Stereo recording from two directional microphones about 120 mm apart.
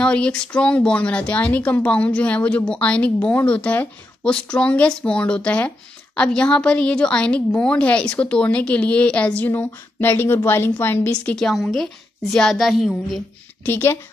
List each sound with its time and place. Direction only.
0.0 s a woman's voice: 10° left (ahead or behind)
13.7 s a woman's voice: 20° left (ahead or behind)